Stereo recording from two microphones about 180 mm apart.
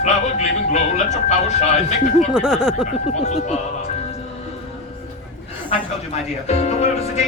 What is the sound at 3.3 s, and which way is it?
Speech, 40° left (ahead or behind).